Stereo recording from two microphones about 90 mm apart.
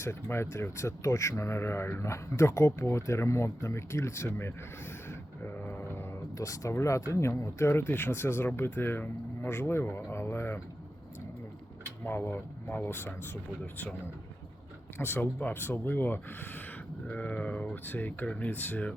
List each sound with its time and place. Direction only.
0.0 s speech: 30° left (ahead or behind)
5.0 s vehicle: 25° left (ahead or behind)
6.3 s speech: 35° left (ahead or behind)
12.0 s speech: 25° left (ahead or behind)
14.9 s speech: 25° left (ahead or behind)